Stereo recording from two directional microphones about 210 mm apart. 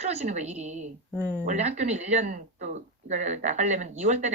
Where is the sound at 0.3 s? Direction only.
35° right (ahead or behind).